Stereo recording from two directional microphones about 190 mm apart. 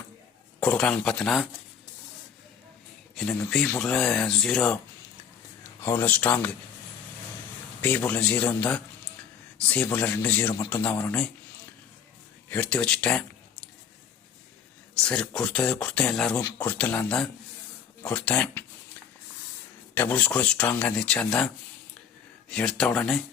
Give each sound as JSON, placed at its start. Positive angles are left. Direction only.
{"t": 0.6, "sound": "speech", "side_deg": 5}
{"t": 3.2, "sound": "speech", "side_deg": 5}
{"t": 5.8, "sound": "speech", "side_deg": 10}
{"t": 7.8, "sound": "speech", "side_deg": 10}
{"t": 12.5, "sound": "speech", "side_deg": 5}
{"t": 15.0, "sound": "speech", "side_deg": 5}
{"t": 19.9, "sound": "speech", "side_deg": 10}